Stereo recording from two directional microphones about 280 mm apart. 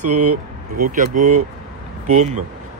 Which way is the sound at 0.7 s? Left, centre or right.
Right.